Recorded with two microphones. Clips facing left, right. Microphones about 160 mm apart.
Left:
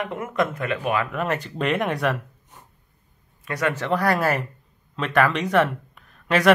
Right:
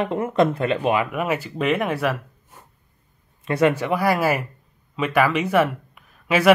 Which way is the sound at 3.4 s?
25° right (ahead or behind).